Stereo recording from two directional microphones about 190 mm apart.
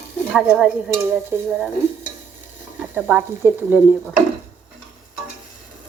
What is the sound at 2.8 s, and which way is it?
Speech, 10° right (ahead or behind).